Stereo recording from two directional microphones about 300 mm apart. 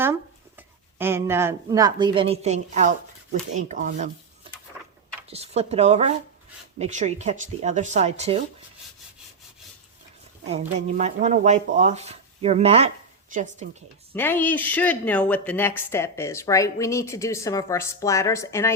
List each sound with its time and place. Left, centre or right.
0.0 s speech: centre
10.4 s speech: right
14.1 s speech: centre